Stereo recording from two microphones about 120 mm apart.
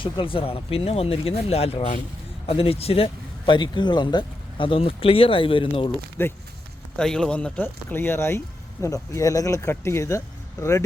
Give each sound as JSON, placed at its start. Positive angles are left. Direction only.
{"t": 0.0, "sound": "speech", "side_deg": 45}
{"t": 6.2, "sound": "speech", "side_deg": 20}
{"t": 6.9, "sound": "speech", "side_deg": 5}